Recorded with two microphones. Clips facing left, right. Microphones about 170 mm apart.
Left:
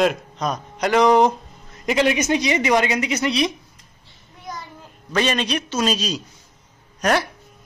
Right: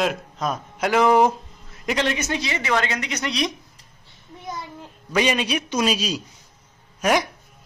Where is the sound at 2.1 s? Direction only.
15° left (ahead or behind).